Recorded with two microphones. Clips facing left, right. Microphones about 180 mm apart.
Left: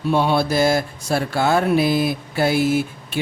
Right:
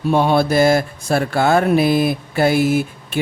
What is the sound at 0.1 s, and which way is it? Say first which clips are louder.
Speech: right 3 dB; 50° right (ahead or behind).